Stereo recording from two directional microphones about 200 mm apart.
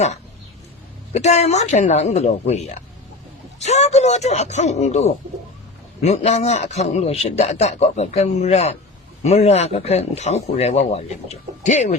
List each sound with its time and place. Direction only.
1.1 s a man's voice: 35° left (ahead or behind)